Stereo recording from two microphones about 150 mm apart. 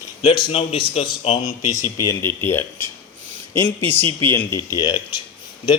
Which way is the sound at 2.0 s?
15° left (ahead or behind).